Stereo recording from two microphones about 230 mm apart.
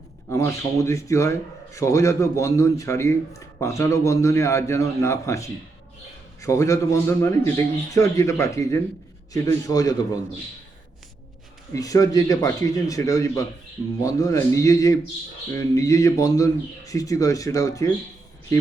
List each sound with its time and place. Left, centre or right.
0.3 s speech: centre
11.7 s speech: centre